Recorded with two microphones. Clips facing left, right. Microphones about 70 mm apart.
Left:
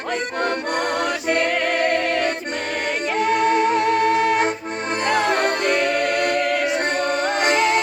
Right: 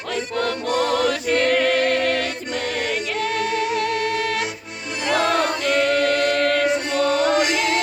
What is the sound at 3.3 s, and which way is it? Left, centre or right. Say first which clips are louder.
Music: left 5 dB; left.